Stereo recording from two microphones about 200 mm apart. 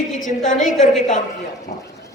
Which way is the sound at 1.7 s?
50° left (ahead or behind).